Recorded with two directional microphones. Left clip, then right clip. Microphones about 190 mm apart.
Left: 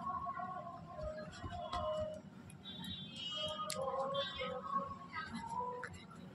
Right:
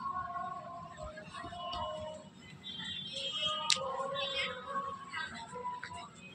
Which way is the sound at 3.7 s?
10° left (ahead or behind).